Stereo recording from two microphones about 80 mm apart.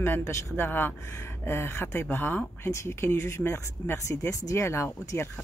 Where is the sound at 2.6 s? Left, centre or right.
Left.